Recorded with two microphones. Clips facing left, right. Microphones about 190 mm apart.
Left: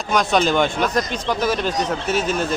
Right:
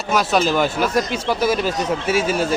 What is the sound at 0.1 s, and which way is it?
Speech, 5° right (ahead or behind).